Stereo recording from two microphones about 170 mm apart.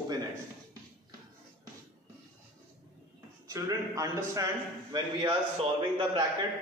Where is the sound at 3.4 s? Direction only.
20° right (ahead or behind).